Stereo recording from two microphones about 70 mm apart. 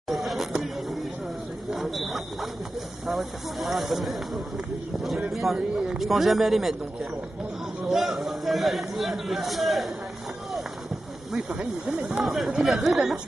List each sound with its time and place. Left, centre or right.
0.1 s a sound: centre
1.7 s a man's voice: centre
7.8 s a man's voice: centre
11.3 s a man's voice: centre